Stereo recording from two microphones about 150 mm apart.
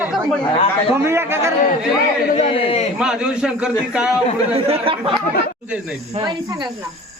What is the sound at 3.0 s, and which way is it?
A man's voice, 5° right (ahead or behind).